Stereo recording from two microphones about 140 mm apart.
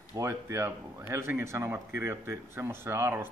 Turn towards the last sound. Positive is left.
turn(degrees=-15)  # may be behind; listen again after turning